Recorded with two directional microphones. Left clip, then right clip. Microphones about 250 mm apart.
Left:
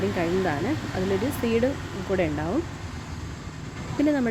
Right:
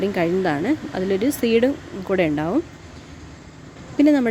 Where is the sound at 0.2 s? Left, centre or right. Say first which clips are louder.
Right 5 dB; right.